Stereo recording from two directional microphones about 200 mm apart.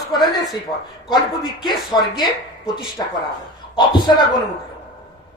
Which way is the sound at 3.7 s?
20° left (ahead or behind).